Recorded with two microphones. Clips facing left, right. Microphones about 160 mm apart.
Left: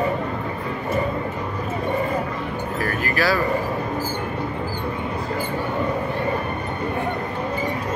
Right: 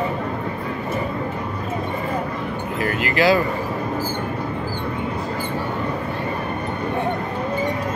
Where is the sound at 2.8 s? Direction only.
20° right (ahead or behind).